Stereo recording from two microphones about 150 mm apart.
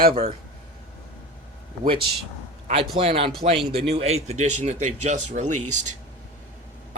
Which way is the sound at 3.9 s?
45° right (ahead or behind).